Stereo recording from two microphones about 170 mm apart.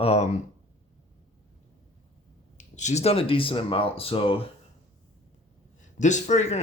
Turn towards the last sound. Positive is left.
turn(degrees=40)  # may be behind; listen again after turning